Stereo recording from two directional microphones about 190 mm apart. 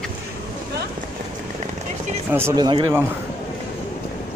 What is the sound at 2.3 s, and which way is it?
Speech, 15° right (ahead or behind).